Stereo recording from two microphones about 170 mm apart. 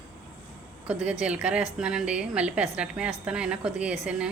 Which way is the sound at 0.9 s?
5° right (ahead or behind).